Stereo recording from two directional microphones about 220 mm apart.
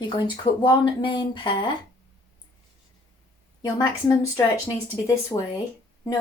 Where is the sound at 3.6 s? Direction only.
15° left (ahead or behind).